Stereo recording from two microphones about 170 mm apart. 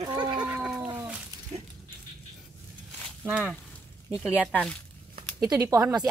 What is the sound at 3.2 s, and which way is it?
Speech, 5° right (ahead or behind).